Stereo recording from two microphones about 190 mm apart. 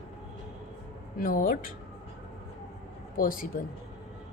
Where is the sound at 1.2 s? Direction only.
45° left (ahead or behind).